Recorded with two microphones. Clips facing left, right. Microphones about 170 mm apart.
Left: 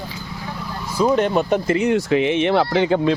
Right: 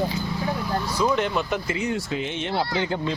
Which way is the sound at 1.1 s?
45° left (ahead or behind).